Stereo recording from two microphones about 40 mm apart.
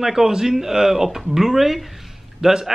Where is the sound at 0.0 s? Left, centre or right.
Centre.